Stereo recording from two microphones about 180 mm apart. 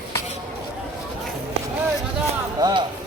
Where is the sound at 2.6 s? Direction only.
20° right (ahead or behind).